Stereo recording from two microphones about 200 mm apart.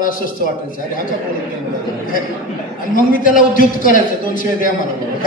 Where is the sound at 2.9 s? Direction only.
40° left (ahead or behind).